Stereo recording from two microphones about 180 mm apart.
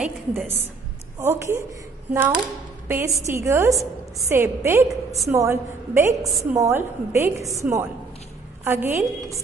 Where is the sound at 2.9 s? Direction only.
15° right (ahead or behind).